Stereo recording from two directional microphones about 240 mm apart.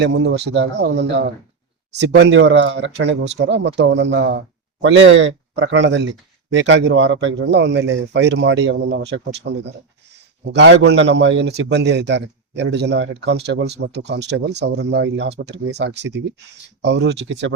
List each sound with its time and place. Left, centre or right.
0.0 s a man's voice: right